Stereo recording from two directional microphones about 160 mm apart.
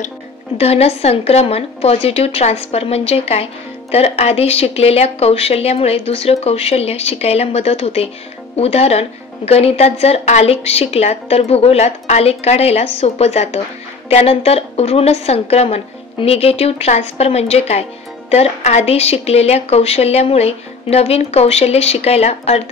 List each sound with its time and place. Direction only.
0.6 s speech: 40° left (ahead or behind)